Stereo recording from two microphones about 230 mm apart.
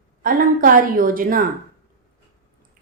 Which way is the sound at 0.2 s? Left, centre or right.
Right.